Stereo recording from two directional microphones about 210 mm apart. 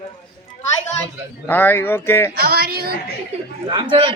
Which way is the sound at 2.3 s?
45° right (ahead or behind).